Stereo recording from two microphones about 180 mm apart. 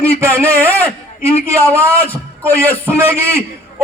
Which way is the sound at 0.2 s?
15° right (ahead or behind).